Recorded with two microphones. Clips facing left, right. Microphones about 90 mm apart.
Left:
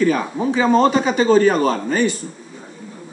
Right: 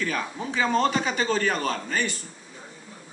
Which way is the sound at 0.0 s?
20° left (ahead or behind).